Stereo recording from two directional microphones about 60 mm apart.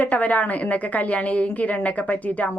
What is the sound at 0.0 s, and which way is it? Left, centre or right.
A woman's voice, left.